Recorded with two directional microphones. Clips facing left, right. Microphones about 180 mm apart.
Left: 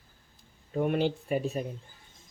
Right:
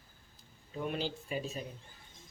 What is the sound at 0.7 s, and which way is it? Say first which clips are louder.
Speech: left 9 dB; 55° left (ahead or behind).